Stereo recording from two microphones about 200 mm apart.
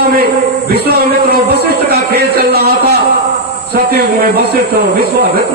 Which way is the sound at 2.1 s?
55° right (ahead or behind).